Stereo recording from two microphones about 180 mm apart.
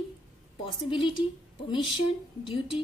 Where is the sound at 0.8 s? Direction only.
30° left (ahead or behind).